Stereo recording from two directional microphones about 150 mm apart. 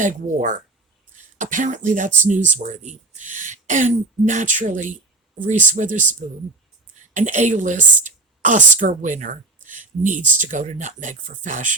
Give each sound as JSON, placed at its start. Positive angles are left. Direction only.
{"t": 0.0, "sound": "a woman's voice", "side_deg": -60}
{"t": 7.1, "sound": "a woman's voice", "side_deg": -55}